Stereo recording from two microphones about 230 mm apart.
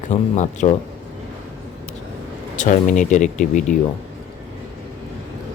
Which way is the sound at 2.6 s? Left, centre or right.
Left.